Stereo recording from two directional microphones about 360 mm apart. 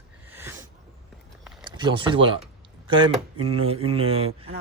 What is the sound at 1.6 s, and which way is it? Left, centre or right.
Speech, centre.